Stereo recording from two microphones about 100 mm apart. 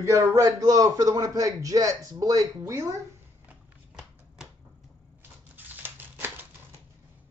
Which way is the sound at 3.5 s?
5° right (ahead or behind).